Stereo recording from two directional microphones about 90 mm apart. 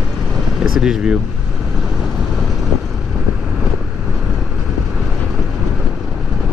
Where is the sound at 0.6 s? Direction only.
5° right (ahead or behind).